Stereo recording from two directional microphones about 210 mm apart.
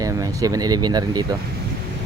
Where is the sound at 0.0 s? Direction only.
15° right (ahead or behind).